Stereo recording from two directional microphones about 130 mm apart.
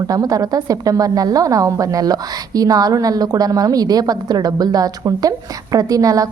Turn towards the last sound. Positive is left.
turn(degrees=-25)  # may be behind; listen again after turning